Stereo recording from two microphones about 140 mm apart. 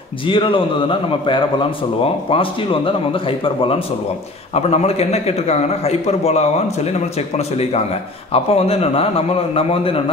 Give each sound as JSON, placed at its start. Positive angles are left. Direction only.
{"t": 0.3, "sound": "a man's voice", "side_deg": 35}